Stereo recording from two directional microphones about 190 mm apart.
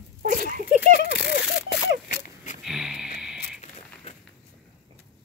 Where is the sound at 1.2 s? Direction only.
5° right (ahead or behind).